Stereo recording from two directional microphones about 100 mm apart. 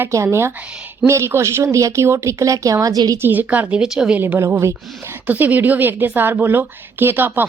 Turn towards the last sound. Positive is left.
turn(degrees=-20)  # may be behind; listen again after turning